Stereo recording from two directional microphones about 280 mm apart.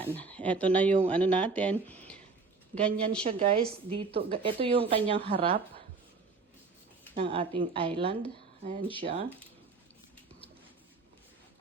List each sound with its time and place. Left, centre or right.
0.0 s speech: centre
3.2 s a woman's voice: right
7.2 s a woman's voice: centre